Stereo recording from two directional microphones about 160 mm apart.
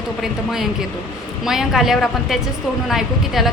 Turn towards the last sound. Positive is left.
turn(degrees=0)  # may be behind; listen again after turning